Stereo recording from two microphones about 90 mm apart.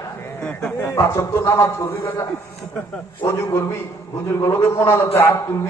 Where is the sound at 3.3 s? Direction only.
35° left (ahead or behind).